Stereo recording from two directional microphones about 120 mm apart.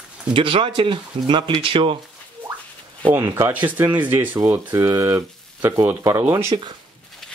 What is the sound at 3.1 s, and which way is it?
Speech, 20° right (ahead or behind).